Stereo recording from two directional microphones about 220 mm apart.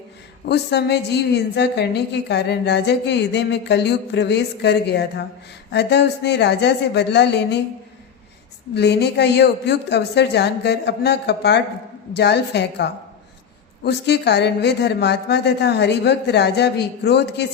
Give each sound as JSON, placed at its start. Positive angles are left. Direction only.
{"t": 0.4, "sound": "a woman's voice", "side_deg": 50}
{"t": 8.7, "sound": "a woman's voice", "side_deg": 50}